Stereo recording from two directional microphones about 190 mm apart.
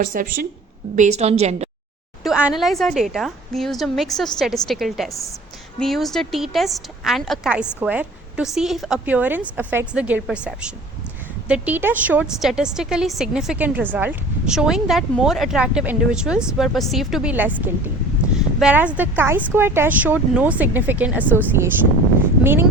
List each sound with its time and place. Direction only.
0.0 s speech: 45° right (ahead or behind)
0.9 s a woman's voice: 35° right (ahead or behind)
2.2 s a woman's voice: 5° right (ahead or behind)